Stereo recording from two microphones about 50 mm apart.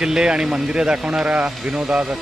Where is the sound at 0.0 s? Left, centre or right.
Centre.